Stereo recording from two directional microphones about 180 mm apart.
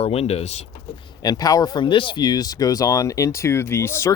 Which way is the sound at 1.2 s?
20° left (ahead or behind).